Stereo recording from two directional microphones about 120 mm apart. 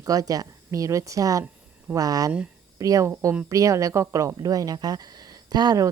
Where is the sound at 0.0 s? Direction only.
30° right (ahead or behind).